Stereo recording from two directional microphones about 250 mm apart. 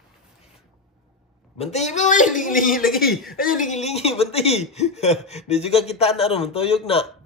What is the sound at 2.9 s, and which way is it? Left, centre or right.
Speech, centre.